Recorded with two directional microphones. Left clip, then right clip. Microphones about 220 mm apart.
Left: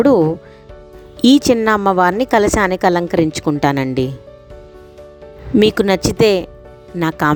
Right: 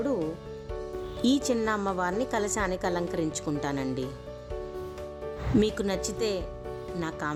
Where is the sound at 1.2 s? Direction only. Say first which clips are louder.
Left 15 dB; 40° left (ahead or behind).